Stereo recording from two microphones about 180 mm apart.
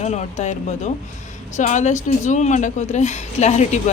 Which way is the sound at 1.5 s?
40° left (ahead or behind).